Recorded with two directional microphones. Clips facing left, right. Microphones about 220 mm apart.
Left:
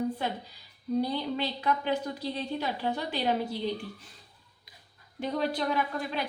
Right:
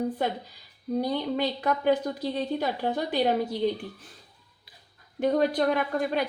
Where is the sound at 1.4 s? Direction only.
50° right (ahead or behind).